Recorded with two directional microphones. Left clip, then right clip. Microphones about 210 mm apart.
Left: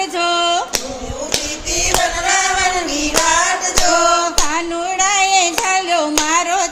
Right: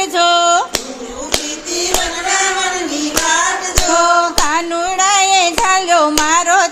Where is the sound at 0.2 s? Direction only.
15° right (ahead or behind).